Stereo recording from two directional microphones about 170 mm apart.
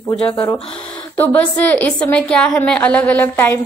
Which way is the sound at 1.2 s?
10° left (ahead or behind).